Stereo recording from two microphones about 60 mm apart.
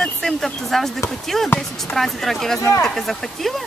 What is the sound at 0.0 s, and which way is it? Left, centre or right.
Speech, centre.